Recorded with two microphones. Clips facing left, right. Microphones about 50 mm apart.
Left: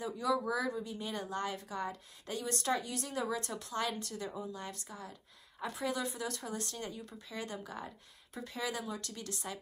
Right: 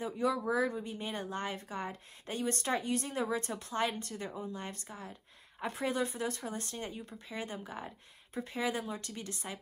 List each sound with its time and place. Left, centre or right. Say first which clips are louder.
0.0 s a woman's voice: right 1 dB; right